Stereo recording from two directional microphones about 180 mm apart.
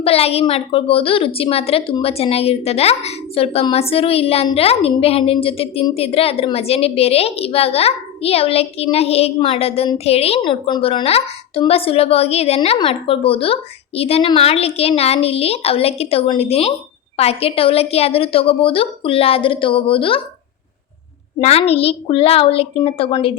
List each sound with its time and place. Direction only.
0.0 s a woman's voice: 35° left (ahead or behind)
21.4 s a woman's voice: 35° left (ahead or behind)